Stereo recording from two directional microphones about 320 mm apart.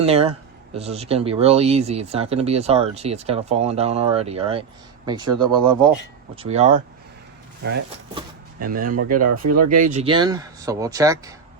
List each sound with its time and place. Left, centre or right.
0.0 s speech: centre
8.5 s speech: right
9.2 s speech: right
9.8 s speech: right